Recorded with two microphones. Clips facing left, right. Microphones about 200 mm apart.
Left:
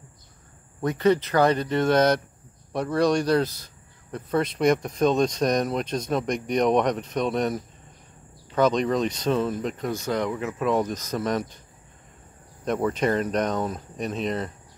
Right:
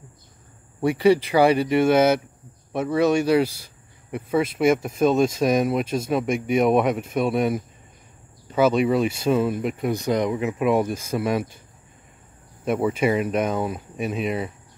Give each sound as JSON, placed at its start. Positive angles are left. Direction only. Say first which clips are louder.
{"t": 0.7, "sound": "speech", "louder": "right 3 dB", "side_deg": -10}
{"t": 12.6, "sound": "speech", "louder": "right 2 dB", "side_deg": -10}